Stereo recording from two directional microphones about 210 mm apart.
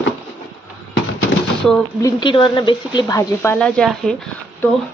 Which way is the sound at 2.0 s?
20° left (ahead or behind).